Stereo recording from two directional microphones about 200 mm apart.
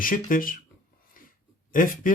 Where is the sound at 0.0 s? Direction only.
45° left (ahead or behind).